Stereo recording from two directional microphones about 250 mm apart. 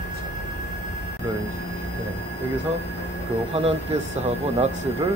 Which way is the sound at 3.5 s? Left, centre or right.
Right.